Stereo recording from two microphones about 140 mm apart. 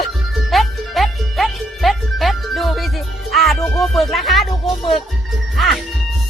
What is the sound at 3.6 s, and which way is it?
Speech, 10° left (ahead or behind).